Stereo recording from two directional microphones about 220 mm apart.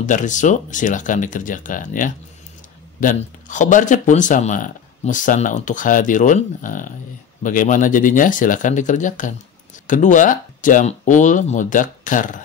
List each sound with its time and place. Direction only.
0.0 s speech: 35° left (ahead or behind)